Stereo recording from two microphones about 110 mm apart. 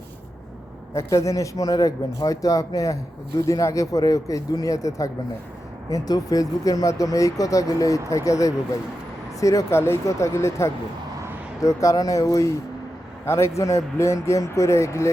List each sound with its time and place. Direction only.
0.9 s speech: 30° left (ahead or behind)